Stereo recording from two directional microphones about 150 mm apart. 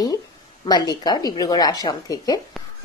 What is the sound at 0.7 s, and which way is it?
Speech, 25° left (ahead or behind).